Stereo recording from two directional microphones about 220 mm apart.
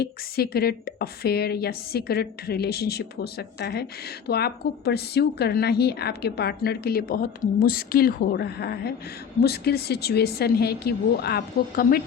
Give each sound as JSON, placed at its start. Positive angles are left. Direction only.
{"t": 0.0, "sound": "a woman's voice", "side_deg": 45}